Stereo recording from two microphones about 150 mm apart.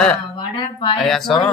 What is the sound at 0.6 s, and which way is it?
Speech, 35° left (ahead or behind).